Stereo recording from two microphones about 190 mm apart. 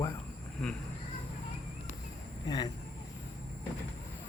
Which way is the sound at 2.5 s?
20° left (ahead or behind).